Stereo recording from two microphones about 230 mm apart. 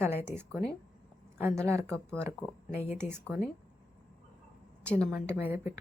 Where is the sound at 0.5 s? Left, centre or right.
Centre.